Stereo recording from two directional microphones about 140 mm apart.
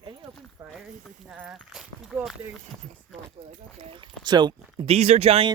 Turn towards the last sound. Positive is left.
turn(degrees=-45)  # may be behind; listen again after turning